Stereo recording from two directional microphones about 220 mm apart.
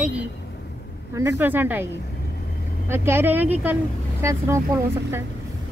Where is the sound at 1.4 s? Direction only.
10° right (ahead or behind).